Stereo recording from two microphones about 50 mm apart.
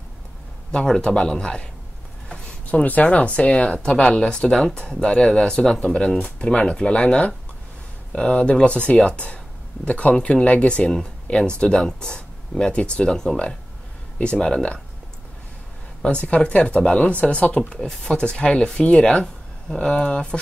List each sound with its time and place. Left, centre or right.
0.8 s speech: centre
2.6 s speech: left
3.9 s speech: centre
10.9 s speech: centre
16.0 s speech: left